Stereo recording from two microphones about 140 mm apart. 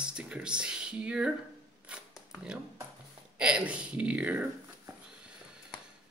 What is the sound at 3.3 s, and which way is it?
Speech, 10° right (ahead or behind).